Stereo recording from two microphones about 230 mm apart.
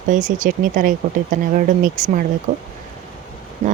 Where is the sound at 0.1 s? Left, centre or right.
Right.